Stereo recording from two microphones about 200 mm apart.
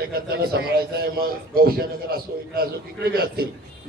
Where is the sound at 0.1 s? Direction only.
50° right (ahead or behind).